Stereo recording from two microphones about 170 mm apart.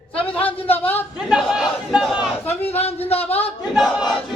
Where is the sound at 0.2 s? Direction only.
10° left (ahead or behind).